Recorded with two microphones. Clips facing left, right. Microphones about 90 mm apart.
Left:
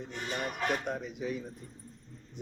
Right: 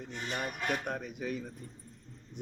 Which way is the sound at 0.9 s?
55° right (ahead or behind).